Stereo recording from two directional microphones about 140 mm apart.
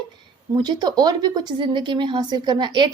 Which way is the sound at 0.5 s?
30° right (ahead or behind).